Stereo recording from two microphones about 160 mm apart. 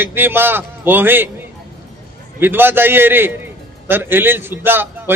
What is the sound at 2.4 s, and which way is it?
A man's voice, 15° right (ahead or behind).